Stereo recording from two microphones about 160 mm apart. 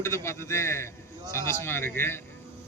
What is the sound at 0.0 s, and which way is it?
A man's voice, 15° left (ahead or behind).